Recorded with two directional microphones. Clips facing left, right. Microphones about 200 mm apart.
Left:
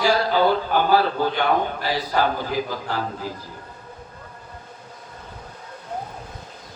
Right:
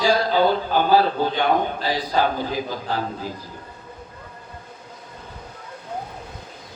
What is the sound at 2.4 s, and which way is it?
Speech, 15° right (ahead or behind).